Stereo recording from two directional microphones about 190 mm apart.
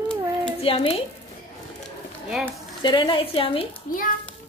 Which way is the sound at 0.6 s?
30° left (ahead or behind).